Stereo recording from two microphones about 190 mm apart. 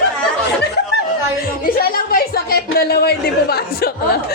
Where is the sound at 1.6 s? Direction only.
50° left (ahead or behind).